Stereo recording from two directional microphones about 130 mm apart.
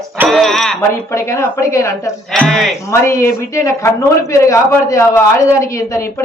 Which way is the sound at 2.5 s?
Centre (ahead or behind).